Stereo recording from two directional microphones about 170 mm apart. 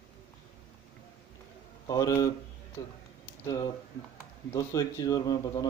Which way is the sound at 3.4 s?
20° left (ahead or behind).